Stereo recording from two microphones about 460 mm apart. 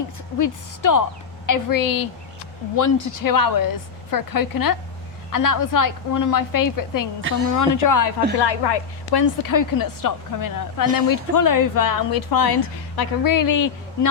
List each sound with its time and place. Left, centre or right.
0.3 s a woman's voice: left
8.4 s a woman's voice: left
9.2 s speech: left